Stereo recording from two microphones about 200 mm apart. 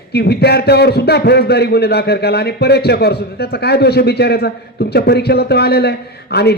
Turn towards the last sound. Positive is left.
turn(degrees=55)  # may be behind; listen again after turning